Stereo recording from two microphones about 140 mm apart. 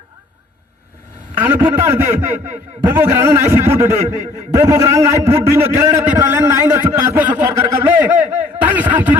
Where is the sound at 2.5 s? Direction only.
55° right (ahead or behind).